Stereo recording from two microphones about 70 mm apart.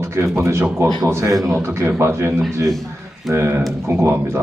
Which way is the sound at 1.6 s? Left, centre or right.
Right.